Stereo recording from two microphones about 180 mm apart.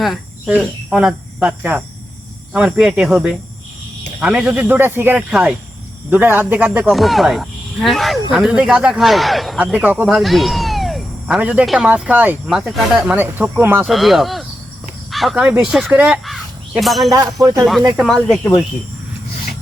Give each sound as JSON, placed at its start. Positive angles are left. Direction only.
{"t": 0.0, "sound": "speech", "side_deg": -5}
{"t": 13.8, "sound": "speech", "side_deg": 0}
{"t": 17.1, "sound": "speech", "side_deg": -20}
{"t": 17.6, "sound": "speech", "side_deg": 0}